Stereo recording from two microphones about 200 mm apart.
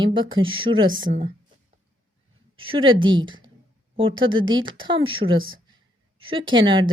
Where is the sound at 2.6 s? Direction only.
25° right (ahead or behind).